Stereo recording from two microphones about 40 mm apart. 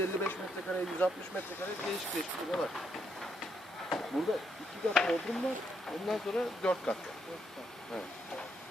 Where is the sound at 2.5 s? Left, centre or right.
Centre.